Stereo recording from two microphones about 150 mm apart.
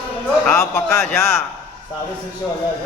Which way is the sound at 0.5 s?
20° left (ahead or behind).